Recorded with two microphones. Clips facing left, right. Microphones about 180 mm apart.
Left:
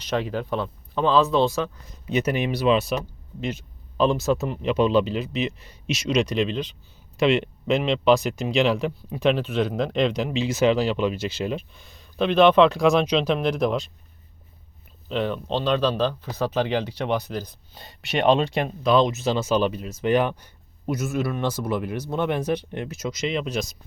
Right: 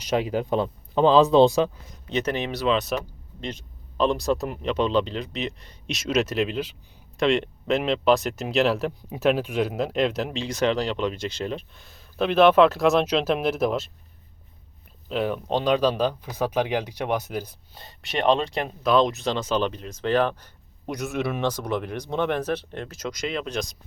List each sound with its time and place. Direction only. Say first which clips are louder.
0.0 s speech: right 2 dB; 10° right (ahead or behind)
1.9 s speech: left 2 dB; 10° left (ahead or behind)
2.9 s speech: left 1 dB; centre (ahead or behind)
4.6 s speech: left 4 dB; 10° left (ahead or behind)
15.1 s speech: even; 10° right (ahead or behind)